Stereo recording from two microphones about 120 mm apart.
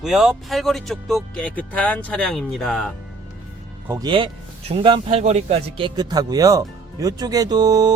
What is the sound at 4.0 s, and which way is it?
Speech, 45° right (ahead or behind).